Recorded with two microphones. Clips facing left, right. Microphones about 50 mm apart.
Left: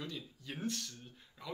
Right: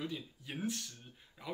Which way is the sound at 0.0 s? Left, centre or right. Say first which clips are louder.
Right 3 dB; centre.